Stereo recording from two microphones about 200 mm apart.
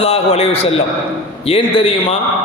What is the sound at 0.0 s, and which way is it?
A man's voice, 30° left (ahead or behind).